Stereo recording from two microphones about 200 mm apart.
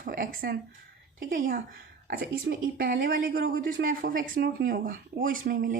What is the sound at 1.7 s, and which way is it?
A woman's voice, 55° right (ahead or behind).